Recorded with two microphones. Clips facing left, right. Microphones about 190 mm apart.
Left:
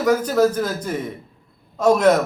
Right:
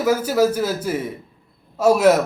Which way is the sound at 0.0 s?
5° right (ahead or behind).